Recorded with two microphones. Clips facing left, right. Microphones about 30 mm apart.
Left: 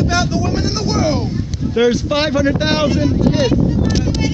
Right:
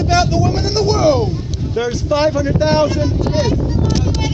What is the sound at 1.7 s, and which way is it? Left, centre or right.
Speech, left.